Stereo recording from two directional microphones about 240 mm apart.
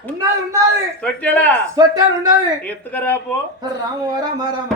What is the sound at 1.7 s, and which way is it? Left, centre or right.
Speech, centre.